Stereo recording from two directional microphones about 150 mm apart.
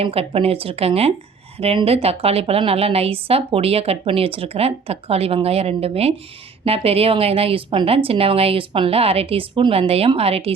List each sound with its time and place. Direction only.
0.0 s a woman's voice: 40° right (ahead or behind)